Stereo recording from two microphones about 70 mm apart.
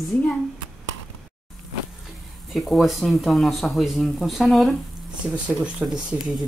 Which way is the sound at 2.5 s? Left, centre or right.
Centre.